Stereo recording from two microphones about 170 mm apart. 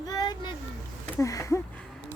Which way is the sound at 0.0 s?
20° left (ahead or behind).